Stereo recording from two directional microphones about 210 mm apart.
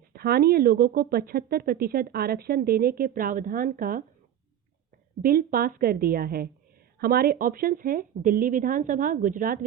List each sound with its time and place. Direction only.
0.1 s speech: 45° right (ahead or behind)
5.2 s speech: 40° right (ahead or behind)